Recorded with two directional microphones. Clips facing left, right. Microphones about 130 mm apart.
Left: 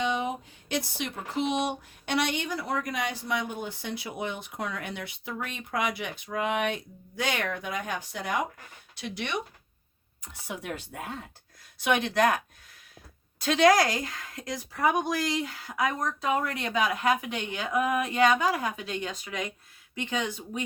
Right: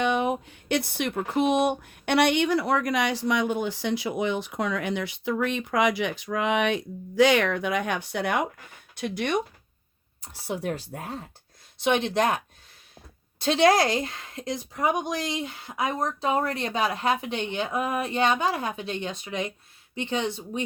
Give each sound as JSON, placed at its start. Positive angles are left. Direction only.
{"t": 0.0, "sound": "speech", "side_deg": -60}
{"t": 9.0, "sound": "speech", "side_deg": -50}
{"t": 10.2, "sound": "a woman's voice", "side_deg": -30}
{"t": 13.4, "sound": "a woman's voice", "side_deg": -30}